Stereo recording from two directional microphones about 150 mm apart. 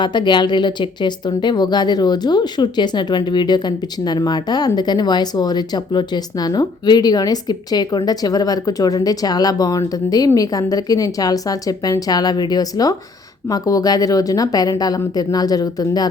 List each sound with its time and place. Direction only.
0.0 s speech: 30° left (ahead or behind)